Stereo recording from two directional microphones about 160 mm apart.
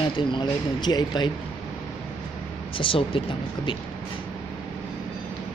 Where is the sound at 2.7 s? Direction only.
35° left (ahead or behind).